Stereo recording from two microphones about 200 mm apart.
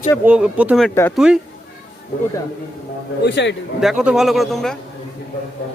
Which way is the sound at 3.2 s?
60° left (ahead or behind).